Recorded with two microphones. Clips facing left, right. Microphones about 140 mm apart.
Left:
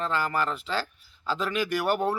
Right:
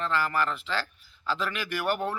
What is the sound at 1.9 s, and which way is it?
Speech, 35° left (ahead or behind).